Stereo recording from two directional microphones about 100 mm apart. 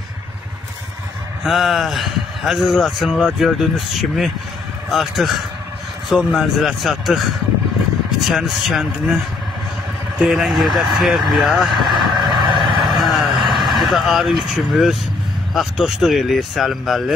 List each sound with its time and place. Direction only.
1.4 s a man's voice: centre (ahead or behind)
12.3 s vehicle: 55° right (ahead or behind)
13.0 s vehicle: centre (ahead or behind)
13.4 s a sound: 50° right (ahead or behind)
13.7 s a man's voice: centre (ahead or behind)